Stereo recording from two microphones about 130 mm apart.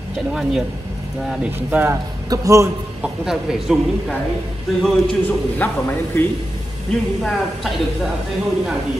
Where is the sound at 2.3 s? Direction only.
25° right (ahead or behind).